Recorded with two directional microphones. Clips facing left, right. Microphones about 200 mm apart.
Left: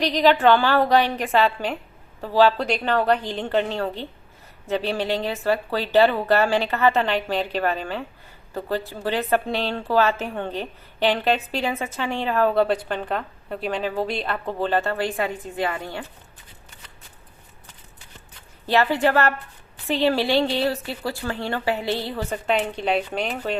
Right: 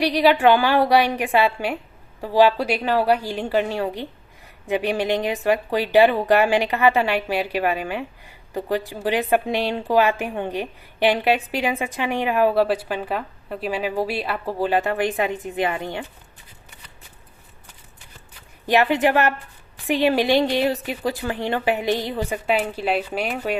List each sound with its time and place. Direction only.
0.0 s speech: 10° right (ahead or behind)
18.6 s speech: 15° right (ahead or behind)